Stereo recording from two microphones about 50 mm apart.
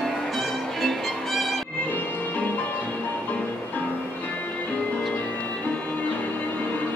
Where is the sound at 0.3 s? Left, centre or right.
Centre.